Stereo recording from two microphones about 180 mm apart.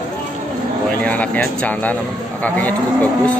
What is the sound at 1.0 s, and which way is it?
Speech, 10° left (ahead or behind).